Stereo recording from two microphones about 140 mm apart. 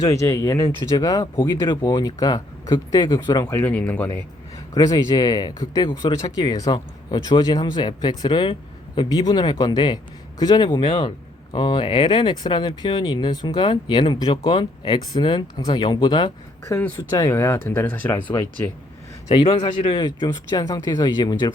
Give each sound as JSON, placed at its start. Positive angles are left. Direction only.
{"t": 0.0, "sound": "speech", "side_deg": 20}
{"t": 3.4, "sound": "speech", "side_deg": 15}
{"t": 4.7, "sound": "speech", "side_deg": 25}
{"t": 19.3, "sound": "speech", "side_deg": 40}